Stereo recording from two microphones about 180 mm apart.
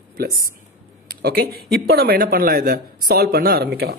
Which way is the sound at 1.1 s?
60° right (ahead or behind).